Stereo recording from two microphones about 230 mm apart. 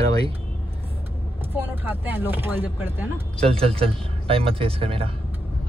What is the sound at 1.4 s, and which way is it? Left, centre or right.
Speech, centre.